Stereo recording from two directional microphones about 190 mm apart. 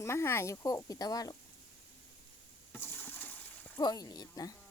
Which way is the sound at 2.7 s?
10° left (ahead or behind).